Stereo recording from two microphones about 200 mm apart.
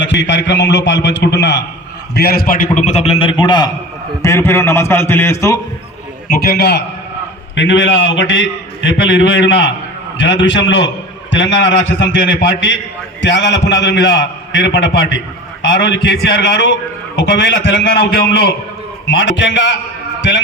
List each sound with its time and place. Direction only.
0.0 s a man's voice: 65° left (ahead or behind)
2.1 s a man's voice: 50° left (ahead or behind); by 5.5 s 15° left (ahead or behind)
6.2 s a man's voice: 50° left (ahead or behind)
19.0 s a man's voice: 65° left (ahead or behind)